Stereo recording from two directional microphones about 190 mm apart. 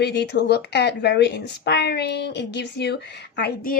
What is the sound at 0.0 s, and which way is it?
Speech, 60° left (ahead or behind).